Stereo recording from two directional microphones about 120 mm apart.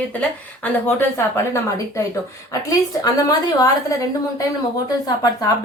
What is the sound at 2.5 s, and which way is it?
A woman's voice, 30° left (ahead or behind).